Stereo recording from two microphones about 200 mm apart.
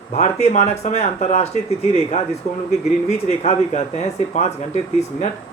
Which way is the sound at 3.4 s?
30° left (ahead or behind).